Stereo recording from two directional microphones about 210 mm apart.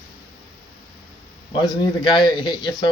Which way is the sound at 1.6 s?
20° left (ahead or behind).